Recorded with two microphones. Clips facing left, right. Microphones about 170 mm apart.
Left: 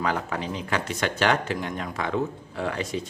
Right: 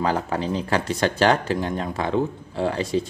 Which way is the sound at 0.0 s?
35° right (ahead or behind).